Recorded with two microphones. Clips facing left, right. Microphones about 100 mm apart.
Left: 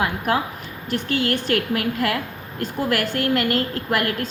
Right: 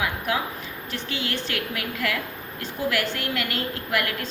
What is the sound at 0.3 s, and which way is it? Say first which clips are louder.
A woman's voice: left 4 dB; 45° left (ahead or behind).